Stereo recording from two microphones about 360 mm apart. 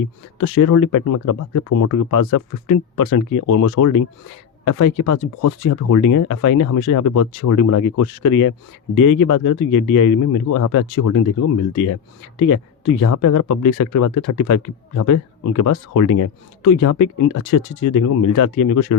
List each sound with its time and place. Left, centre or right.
0.3 s speech: left
13.0 s speech: left